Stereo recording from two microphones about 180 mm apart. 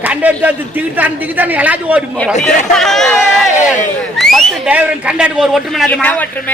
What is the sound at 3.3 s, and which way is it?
Crowd, centre (ahead or behind).